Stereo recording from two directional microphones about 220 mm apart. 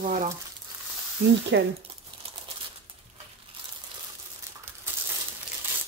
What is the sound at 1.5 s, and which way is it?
Speech, 50° right (ahead or behind).